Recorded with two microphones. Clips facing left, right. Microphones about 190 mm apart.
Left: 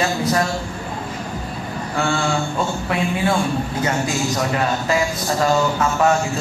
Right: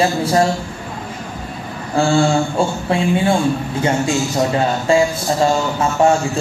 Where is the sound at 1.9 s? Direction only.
30° right (ahead or behind).